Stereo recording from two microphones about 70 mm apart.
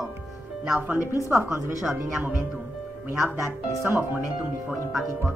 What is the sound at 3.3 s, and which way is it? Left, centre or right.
Speech, right.